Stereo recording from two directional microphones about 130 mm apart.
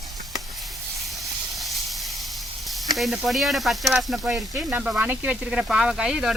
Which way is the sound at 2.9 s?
Centre (ahead or behind).